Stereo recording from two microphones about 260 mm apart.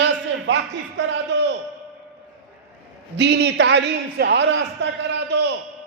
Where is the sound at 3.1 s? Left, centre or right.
Right.